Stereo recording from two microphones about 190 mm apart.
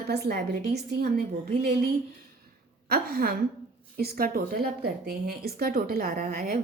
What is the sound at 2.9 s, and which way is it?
Speech, 50° right (ahead or behind).